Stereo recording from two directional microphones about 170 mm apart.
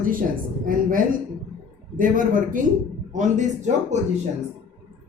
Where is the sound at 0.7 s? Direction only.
55° right (ahead or behind).